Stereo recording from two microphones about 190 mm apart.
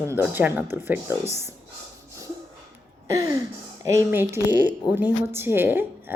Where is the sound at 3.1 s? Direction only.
20° right (ahead or behind).